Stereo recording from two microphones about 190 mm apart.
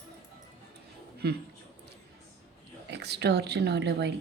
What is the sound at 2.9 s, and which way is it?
Speech, 60° right (ahead or behind).